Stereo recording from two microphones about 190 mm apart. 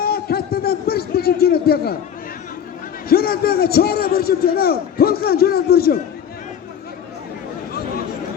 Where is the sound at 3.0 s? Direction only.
50° left (ahead or behind).